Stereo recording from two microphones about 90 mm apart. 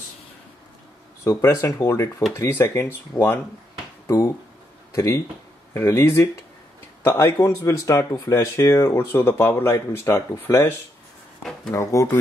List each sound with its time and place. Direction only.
1.2 s speech: 35° left (ahead or behind)
4.9 s speech: 35° left (ahead or behind)
11.7 s speech: 35° left (ahead or behind)